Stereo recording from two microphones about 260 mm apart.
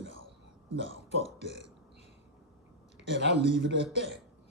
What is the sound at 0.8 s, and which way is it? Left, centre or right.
Speech, left.